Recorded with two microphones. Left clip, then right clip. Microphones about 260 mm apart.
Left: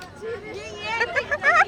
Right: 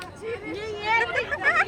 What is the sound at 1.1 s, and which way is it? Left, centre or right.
Hubbub, centre.